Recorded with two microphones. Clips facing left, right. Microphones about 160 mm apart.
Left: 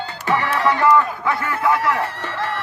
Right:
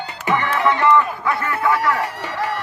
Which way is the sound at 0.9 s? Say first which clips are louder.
Even; centre (ahead or behind).